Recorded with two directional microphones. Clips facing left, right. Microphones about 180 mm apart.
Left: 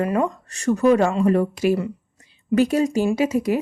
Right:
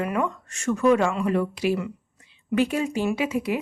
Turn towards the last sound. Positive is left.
turn(degrees=40)  # may be behind; listen again after turning